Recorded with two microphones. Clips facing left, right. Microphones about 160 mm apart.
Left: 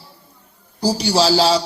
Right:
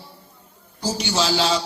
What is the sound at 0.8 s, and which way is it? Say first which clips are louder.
Speech: left 6 dB; 35° left (ahead or behind).